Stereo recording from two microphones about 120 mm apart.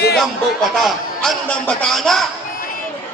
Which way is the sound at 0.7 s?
Centre (ahead or behind).